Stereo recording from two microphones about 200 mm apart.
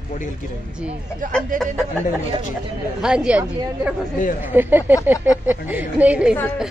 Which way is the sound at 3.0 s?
5° right (ahead or behind).